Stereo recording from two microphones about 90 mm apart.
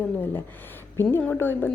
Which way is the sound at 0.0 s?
20° left (ahead or behind).